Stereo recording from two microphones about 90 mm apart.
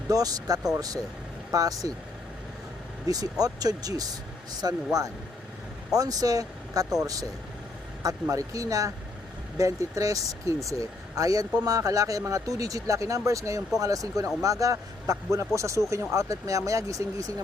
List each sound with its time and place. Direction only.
0.1 s speech: 45° right (ahead or behind)
3.1 s speech: 45° right (ahead or behind)